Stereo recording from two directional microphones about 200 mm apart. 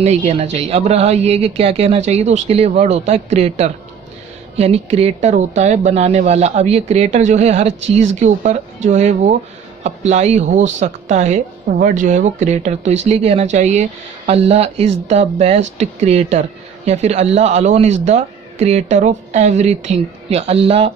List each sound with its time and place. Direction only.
0.0 s speech: 35° right (ahead or behind)